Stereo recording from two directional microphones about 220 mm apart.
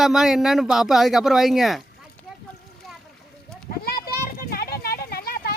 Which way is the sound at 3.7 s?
45° left (ahead or behind).